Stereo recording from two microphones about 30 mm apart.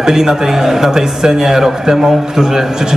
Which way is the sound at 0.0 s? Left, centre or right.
Centre.